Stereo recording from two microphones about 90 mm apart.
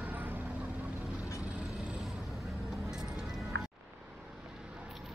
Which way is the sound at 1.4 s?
15° right (ahead or behind).